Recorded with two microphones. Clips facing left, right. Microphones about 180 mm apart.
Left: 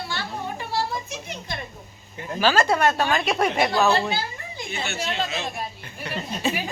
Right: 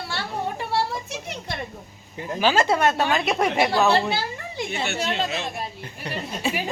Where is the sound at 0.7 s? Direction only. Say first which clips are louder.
Left 1 dB; 70° right (ahead or behind).